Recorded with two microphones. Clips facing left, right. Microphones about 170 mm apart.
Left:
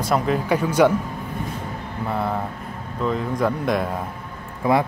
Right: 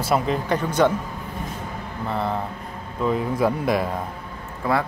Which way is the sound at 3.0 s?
5° right (ahead or behind).